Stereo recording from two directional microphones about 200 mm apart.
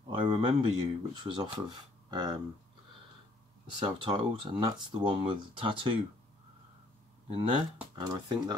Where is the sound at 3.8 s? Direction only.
25° right (ahead or behind).